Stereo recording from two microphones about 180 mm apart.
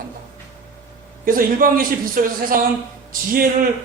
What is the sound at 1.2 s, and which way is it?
A man's voice, 50° right (ahead or behind).